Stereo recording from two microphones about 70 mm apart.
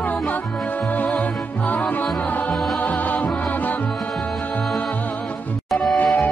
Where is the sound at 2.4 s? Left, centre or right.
Left.